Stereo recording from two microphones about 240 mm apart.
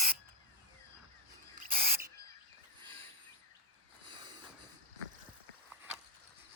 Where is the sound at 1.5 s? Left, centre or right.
Right.